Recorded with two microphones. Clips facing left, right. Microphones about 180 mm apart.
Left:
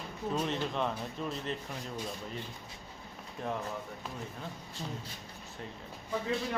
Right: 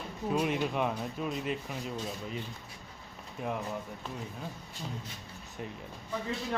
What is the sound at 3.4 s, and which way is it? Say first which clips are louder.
Speech: right 1 dB; 5° right (ahead or behind).